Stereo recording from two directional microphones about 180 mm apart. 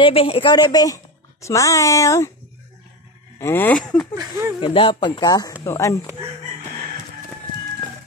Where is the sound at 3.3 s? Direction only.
15° left (ahead or behind).